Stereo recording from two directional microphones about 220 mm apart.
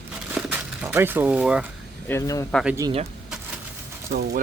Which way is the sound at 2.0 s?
10° left (ahead or behind).